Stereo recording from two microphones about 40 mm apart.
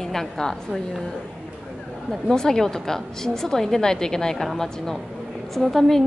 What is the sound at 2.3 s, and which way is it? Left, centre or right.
A woman's voice, centre.